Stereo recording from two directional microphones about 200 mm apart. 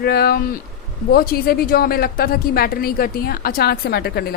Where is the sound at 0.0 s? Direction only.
50° left (ahead or behind).